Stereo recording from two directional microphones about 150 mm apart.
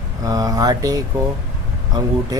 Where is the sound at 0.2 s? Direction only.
25° right (ahead or behind).